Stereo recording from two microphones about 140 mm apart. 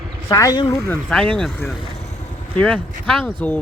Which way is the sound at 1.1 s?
5° left (ahead or behind).